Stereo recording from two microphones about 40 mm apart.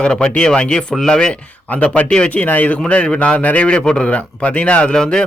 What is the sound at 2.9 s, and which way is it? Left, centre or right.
Speech, left.